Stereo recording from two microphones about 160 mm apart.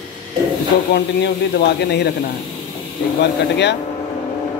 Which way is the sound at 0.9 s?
90° left.